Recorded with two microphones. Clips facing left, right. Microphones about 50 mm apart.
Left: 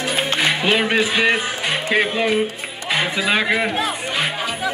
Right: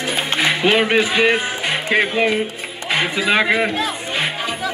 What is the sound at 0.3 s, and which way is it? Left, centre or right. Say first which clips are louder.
A man's voice: right 3 dB; right.